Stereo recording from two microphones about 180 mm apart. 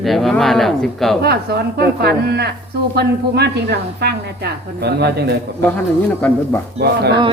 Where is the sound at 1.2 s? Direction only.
60° right (ahead or behind).